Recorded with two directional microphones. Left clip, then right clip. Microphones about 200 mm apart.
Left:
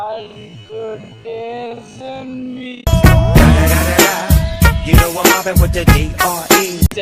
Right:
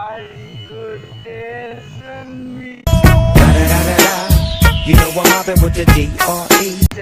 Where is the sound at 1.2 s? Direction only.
60° left (ahead or behind).